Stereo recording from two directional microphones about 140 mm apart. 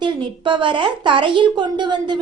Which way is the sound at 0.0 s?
35° right (ahead or behind).